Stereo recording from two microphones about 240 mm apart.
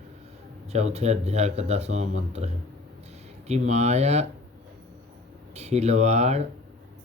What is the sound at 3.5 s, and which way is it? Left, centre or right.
Speech, right.